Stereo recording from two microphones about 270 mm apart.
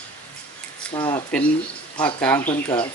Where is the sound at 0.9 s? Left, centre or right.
Centre.